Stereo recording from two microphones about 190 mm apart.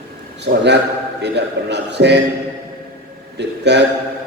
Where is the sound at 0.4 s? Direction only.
60° right (ahead or behind).